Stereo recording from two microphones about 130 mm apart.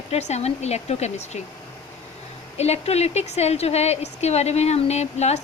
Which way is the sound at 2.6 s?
55° left (ahead or behind).